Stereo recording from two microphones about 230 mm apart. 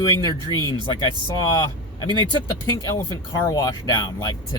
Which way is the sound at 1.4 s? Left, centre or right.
Centre.